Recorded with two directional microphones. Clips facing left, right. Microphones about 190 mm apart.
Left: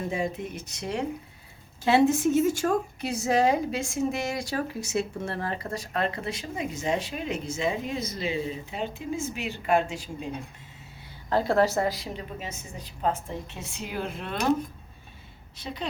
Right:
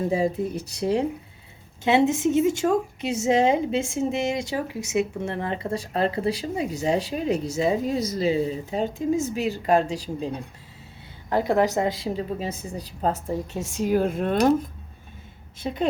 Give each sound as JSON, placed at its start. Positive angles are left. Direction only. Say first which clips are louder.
{"t": 0.1, "sound": "a woman's voice", "louder": "right 7 dB", "side_deg": -35}
{"t": 1.8, "sound": "a woman's voice", "louder": "right 1 dB", "side_deg": -20}
{"t": 11.3, "sound": "a woman's voice", "louder": "right 2 dB", "side_deg": -15}
{"t": 15.5, "sound": "a woman's voice", "louder": "right 9 dB", "side_deg": -50}